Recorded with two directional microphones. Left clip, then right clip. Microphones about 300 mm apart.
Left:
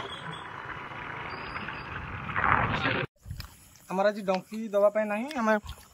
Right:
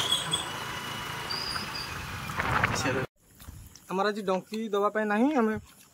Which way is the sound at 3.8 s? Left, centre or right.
Centre.